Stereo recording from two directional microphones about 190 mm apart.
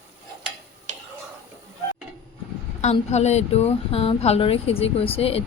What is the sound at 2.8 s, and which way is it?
A woman's voice, 35° left (ahead or behind).